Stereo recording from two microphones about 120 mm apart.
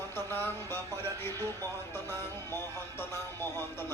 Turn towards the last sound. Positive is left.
turn(degrees=20)  # may be behind; listen again after turning